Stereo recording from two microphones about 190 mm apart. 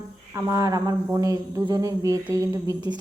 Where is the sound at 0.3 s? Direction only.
15° right (ahead or behind).